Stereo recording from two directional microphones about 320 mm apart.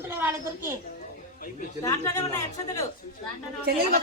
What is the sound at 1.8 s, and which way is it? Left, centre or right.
Speech, centre.